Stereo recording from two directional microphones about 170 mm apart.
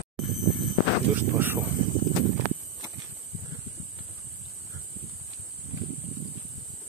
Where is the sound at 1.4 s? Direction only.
10° right (ahead or behind).